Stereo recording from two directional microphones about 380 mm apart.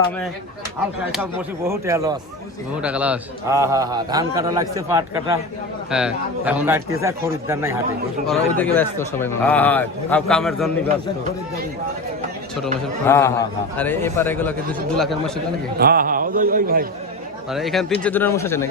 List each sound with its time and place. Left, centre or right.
1.1 s a man's voice: centre
8.3 s a man's voice: centre
12.6 s a man's voice: centre
15.8 s a man's voice: right
17.5 s a man's voice: centre